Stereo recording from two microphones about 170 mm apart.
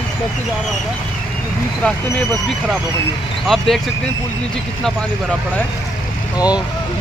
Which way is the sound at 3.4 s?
Centre (ahead or behind).